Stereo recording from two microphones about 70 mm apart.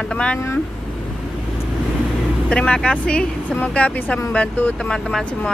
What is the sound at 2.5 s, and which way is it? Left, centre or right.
Speech, centre.